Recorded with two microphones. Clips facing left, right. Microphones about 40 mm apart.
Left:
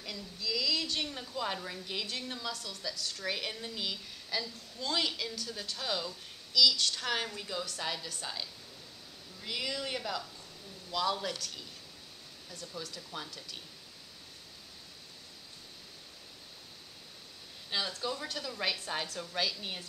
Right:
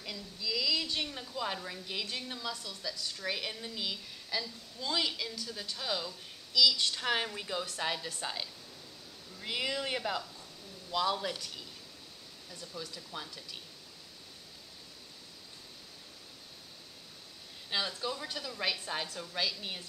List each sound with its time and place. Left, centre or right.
0.0 s a woman's voice: centre
10.9 s speech: centre
12.8 s speech: centre
17.6 s a woman's voice: centre